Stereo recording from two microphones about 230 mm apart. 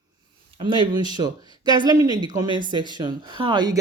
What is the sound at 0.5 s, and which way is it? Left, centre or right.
A woman's voice, right.